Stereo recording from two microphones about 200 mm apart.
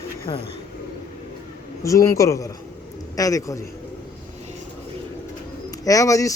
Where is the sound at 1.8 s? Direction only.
15° left (ahead or behind).